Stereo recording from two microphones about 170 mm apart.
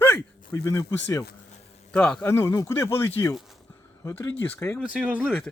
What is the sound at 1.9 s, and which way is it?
Speech, 5° left (ahead or behind).